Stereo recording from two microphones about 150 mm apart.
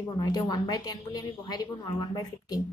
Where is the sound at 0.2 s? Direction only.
25° left (ahead or behind).